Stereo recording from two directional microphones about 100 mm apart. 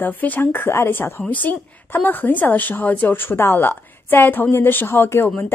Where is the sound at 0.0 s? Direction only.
15° left (ahead or behind).